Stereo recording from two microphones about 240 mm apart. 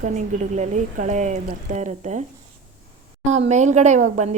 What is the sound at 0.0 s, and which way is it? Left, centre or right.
A woman's voice, right.